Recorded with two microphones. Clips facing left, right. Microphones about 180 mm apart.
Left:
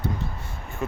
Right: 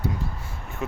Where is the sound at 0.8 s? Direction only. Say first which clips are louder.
Left 1 dB; centre (ahead or behind).